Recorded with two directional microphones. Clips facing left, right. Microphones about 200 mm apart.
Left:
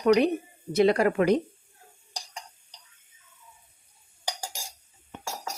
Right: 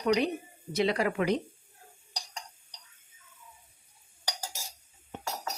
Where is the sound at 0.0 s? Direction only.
55° left (ahead or behind).